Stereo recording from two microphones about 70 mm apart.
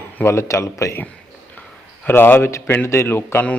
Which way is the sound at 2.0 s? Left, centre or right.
Left.